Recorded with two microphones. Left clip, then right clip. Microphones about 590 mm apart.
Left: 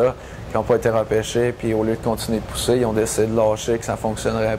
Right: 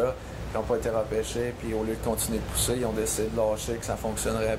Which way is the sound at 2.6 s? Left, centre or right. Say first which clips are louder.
Left 10 dB; left.